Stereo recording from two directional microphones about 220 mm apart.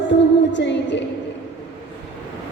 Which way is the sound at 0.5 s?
55° left (ahead or behind).